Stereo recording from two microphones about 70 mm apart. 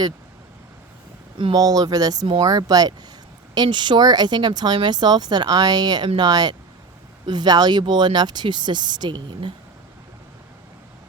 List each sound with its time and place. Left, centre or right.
1.5 s speech: right
3.5 s speech: right